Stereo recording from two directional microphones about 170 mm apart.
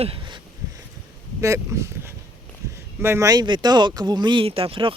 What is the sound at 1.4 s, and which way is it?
Speech, 15° right (ahead or behind).